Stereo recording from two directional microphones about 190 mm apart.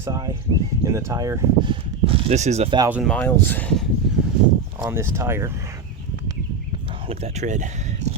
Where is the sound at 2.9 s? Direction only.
Centre (ahead or behind).